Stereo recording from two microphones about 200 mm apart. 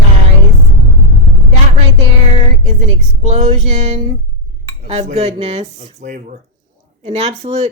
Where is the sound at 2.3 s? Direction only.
30° right (ahead or behind).